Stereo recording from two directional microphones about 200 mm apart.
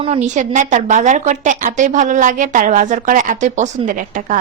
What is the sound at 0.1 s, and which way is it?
A woman's voice, 35° right (ahead or behind).